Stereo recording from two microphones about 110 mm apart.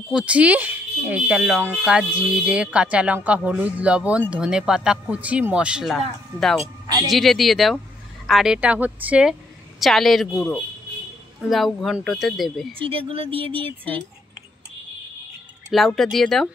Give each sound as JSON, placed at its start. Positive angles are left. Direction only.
{"t": 0.1, "sound": "a woman's voice", "side_deg": -10}
{"t": 12.8, "sound": "speech", "side_deg": -55}
{"t": 15.7, "sound": "a woman's voice", "side_deg": 0}